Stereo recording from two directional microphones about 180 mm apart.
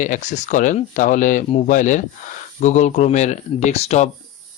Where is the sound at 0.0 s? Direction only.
40° left (ahead or behind).